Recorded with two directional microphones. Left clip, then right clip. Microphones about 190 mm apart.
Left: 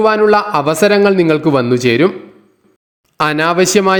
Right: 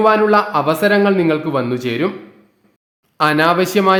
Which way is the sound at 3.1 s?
35° left (ahead or behind).